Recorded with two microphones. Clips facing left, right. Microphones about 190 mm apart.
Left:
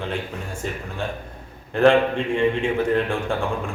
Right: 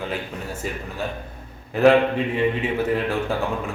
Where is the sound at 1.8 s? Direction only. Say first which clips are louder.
Right 1 dB; 5° right (ahead or behind).